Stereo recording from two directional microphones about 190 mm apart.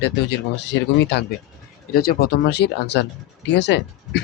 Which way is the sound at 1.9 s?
50° left (ahead or behind).